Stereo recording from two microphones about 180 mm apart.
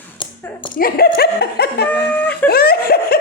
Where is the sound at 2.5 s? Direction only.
55° left (ahead or behind).